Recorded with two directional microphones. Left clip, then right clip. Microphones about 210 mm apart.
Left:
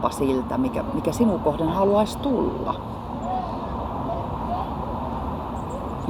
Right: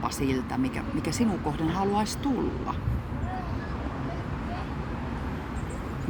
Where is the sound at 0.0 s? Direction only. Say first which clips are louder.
Left 6 dB; 60° right (ahead or behind).